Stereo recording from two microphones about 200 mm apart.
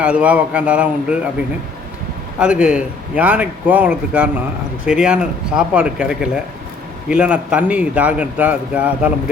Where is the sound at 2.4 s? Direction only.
5° right (ahead or behind).